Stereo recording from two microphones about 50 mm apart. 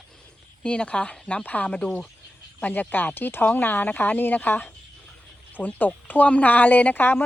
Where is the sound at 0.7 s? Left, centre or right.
Left.